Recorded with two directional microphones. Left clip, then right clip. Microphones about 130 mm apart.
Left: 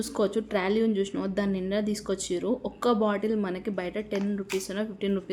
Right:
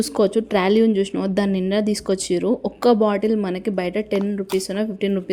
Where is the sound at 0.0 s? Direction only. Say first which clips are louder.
Right 9 dB; 45° right (ahead or behind).